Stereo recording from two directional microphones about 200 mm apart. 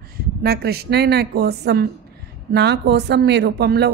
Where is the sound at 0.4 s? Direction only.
50° right (ahead or behind).